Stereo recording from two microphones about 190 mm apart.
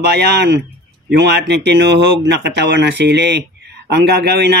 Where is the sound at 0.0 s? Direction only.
60° right (ahead or behind).